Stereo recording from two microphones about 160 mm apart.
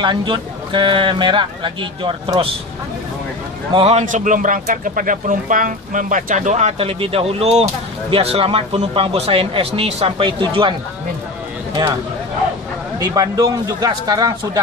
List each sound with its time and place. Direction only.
0.0 s speech: 30° right (ahead or behind)
3.7 s speech: 40° right (ahead or behind)
4.0 s speech: 55° right (ahead or behind); by 10.7 s 30° right (ahead or behind)
13.0 s a man's voice: 25° right (ahead or behind)